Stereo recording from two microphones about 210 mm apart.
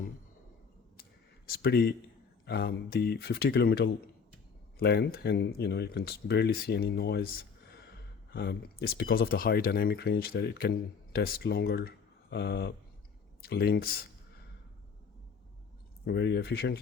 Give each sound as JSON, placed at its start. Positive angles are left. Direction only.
{"t": 1.5, "sound": "a man's voice", "side_deg": 50}
{"t": 16.0, "sound": "speech", "side_deg": 50}